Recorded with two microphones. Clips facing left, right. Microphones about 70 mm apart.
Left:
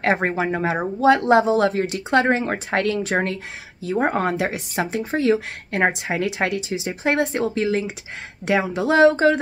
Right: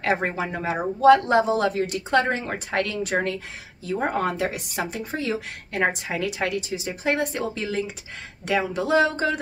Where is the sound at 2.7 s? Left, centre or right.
Left.